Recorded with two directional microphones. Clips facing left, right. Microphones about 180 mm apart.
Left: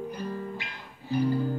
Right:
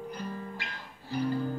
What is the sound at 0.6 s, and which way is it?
Music, 15° left (ahead or behind).